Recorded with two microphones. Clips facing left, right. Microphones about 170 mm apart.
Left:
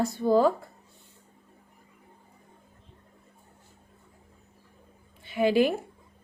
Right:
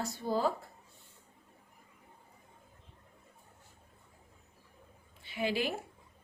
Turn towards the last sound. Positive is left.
turn(degrees=55)  # may be behind; listen again after turning